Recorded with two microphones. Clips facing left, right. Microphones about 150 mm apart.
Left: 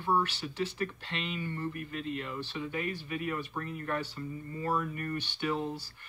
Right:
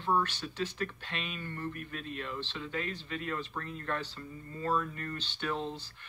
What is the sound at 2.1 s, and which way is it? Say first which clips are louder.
Speech: left 2 dB; 15° left (ahead or behind).